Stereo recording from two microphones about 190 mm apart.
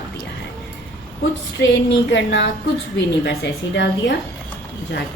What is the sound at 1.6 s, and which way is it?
A woman's voice, 70° left (ahead or behind).